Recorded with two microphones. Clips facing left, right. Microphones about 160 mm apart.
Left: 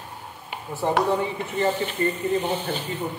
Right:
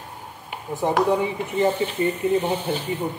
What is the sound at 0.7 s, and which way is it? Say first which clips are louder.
Speech: right 2 dB; 15° right (ahead or behind).